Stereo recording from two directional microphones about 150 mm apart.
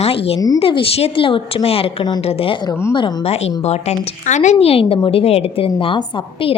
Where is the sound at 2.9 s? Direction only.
40° left (ahead or behind).